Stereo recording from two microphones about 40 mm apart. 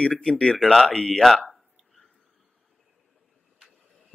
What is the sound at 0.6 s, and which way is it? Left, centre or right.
Speech, centre.